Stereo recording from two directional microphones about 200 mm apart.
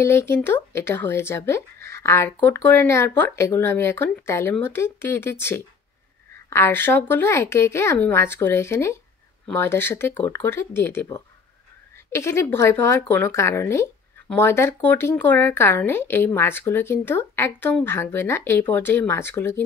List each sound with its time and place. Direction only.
0.0 s speech: 10° left (ahead or behind)